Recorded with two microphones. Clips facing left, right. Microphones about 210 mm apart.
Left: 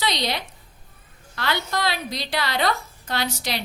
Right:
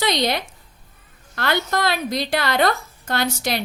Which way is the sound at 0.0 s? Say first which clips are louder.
Right 5 dB; 50° right (ahead or behind).